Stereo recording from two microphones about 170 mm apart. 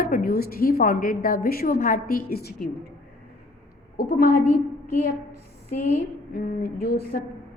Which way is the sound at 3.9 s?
60° left (ahead or behind).